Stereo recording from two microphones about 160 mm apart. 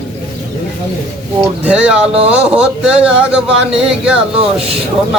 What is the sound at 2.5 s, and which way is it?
Speech, 5° right (ahead or behind).